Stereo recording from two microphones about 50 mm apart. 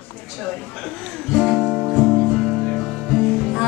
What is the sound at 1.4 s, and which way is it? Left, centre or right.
Music, centre.